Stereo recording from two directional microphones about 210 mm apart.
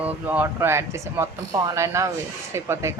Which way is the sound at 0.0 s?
10° right (ahead or behind).